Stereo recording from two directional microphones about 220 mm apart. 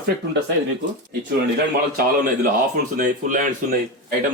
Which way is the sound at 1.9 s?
40° right (ahead or behind).